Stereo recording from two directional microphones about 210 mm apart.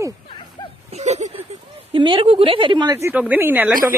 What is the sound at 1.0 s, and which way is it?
A woman's voice, 35° right (ahead or behind).